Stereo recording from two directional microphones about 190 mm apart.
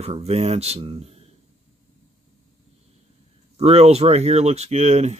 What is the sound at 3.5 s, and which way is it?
Speech, 35° right (ahead or behind).